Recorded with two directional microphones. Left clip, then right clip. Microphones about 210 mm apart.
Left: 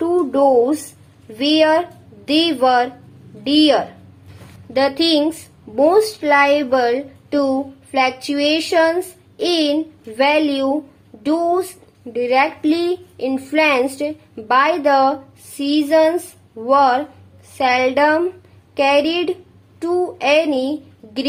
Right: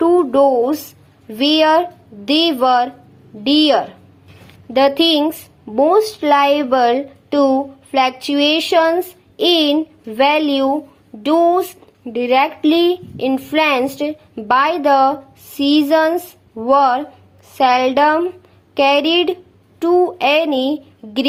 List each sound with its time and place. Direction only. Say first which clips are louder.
0.0 s a woman's voice: right 3 dB; 20° right (ahead or behind)